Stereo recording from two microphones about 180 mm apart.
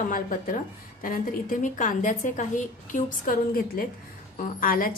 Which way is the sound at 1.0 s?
50° left (ahead or behind).